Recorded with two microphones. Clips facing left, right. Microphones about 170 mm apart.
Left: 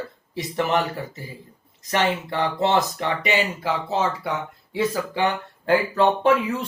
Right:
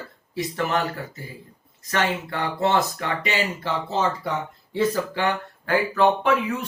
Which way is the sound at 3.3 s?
10° left (ahead or behind).